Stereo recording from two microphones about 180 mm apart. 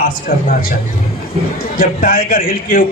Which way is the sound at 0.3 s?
55° left (ahead or behind).